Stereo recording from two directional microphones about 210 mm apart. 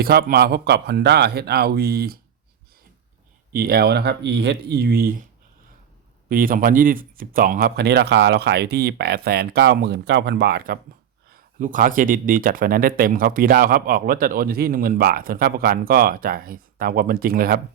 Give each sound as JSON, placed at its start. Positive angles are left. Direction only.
{"t": 0.0, "sound": "speech", "side_deg": -45}
{"t": 3.5, "sound": "speech", "side_deg": -45}
{"t": 6.2, "sound": "speech", "side_deg": -40}